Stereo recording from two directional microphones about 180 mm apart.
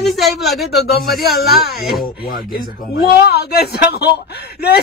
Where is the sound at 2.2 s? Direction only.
55° left (ahead or behind).